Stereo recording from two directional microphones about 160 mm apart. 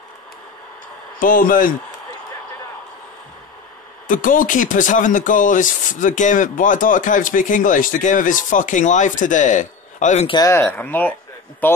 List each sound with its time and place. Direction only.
1.2 s speech: 60° left (ahead or behind)
4.1 s speech: 55° left (ahead or behind)
10.2 s speech: 25° left (ahead or behind)
10.5 s speech: 10° left (ahead or behind)